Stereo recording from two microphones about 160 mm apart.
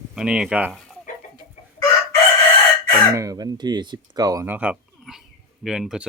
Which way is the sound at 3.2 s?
25° right (ahead or behind).